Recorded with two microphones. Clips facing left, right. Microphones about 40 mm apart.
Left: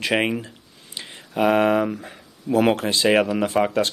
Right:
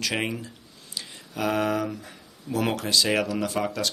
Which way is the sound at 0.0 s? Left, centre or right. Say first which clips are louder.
Left 7 dB; left.